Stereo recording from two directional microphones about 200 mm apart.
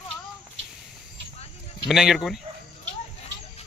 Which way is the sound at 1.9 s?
Centre (ahead or behind).